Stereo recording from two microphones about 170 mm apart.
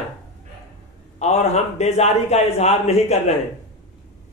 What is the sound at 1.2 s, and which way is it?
A man's voice, 40° left (ahead or behind).